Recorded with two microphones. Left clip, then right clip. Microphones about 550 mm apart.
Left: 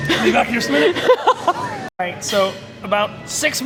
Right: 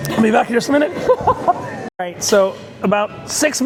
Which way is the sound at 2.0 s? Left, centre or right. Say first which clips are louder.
Right 4 dB; right.